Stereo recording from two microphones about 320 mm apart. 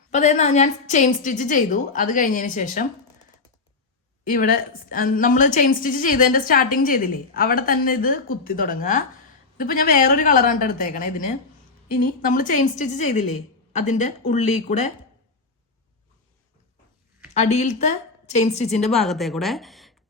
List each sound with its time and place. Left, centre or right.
0.1 s a woman's voice: left
4.2 s a woman's voice: left
17.3 s a woman's voice: left
18.9 s speech: centre